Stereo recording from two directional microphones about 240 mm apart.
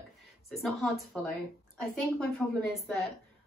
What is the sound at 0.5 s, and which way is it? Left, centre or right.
A woman's voice, centre.